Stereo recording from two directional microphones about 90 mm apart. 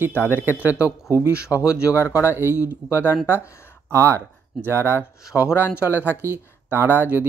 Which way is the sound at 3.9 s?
30° right (ahead or behind).